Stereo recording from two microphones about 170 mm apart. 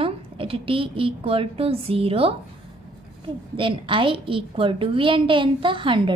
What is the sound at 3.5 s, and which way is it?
A woman's voice, 30° right (ahead or behind).